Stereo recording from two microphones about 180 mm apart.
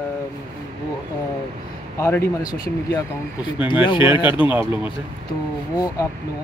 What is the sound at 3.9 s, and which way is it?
Speech, 25° left (ahead or behind).